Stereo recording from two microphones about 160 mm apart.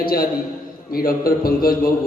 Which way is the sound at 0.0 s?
65° left (ahead or behind).